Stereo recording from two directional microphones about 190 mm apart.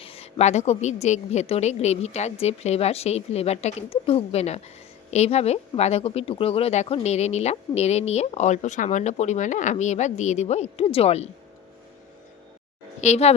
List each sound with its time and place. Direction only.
0.0 s speech: 30° left (ahead or behind)
13.0 s speech: 35° left (ahead or behind)